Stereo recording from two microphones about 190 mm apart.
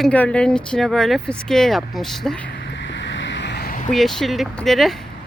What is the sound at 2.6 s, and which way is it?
Vehicle, 65° left (ahead or behind).